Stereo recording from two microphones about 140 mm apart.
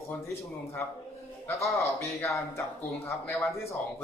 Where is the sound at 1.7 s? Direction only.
20° left (ahead or behind).